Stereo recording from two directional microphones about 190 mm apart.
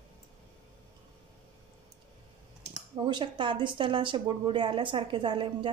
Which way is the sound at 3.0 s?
25° right (ahead or behind).